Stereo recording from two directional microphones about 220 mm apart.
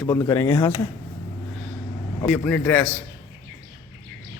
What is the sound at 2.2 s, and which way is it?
Speech, 5° left (ahead or behind).